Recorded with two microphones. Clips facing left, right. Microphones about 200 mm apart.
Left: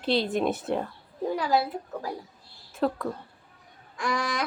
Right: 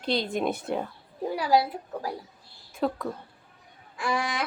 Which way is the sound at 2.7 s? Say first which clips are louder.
Left 1 dB; centre (ahead or behind).